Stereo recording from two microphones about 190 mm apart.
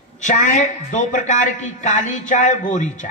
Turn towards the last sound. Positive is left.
turn(degrees=40)  # may be behind; listen again after turning